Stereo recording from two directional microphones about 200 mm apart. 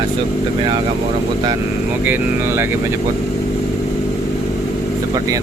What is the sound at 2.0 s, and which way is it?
Speech, 10° right (ahead or behind).